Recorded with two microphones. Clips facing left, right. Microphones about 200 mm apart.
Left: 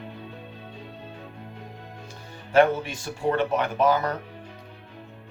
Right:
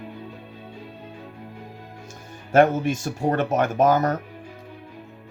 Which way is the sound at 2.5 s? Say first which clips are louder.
Right 2 dB; 45° right (ahead or behind).